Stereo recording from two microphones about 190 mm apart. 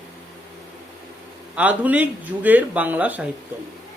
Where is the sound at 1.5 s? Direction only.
10° right (ahead or behind).